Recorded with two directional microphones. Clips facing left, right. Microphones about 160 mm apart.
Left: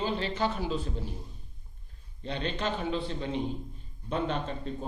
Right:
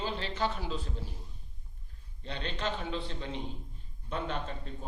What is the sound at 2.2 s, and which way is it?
A man's voice, 15° left (ahead or behind).